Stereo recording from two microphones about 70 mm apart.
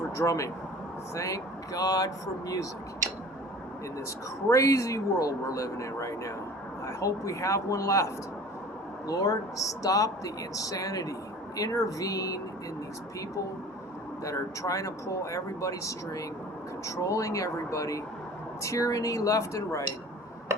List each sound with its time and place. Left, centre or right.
0.2 s speech: left
4.4 s speech: left
14.3 s speech: left